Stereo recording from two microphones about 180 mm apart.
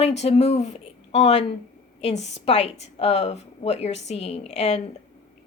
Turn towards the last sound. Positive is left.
turn(degrees=35)  # may be behind; listen again after turning